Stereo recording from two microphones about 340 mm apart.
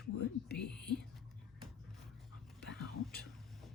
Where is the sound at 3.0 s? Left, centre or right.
Centre.